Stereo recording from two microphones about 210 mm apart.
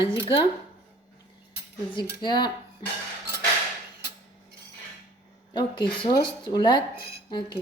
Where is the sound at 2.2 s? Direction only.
20° left (ahead or behind).